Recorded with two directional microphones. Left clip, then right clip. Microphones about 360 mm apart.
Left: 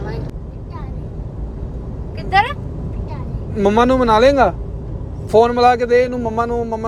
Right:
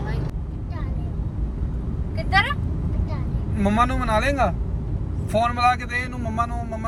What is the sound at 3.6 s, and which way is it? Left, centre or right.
A man's voice, centre.